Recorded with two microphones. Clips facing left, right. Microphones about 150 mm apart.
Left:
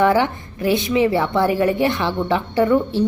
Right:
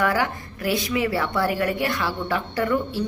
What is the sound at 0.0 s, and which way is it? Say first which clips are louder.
A woman's voice: left 6 dB; 25° left (ahead or behind).